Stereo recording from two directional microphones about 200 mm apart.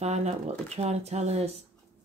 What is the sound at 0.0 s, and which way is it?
Speech, 35° right (ahead or behind).